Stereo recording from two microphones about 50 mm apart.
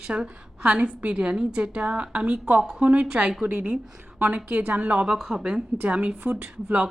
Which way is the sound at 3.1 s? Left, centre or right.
Centre.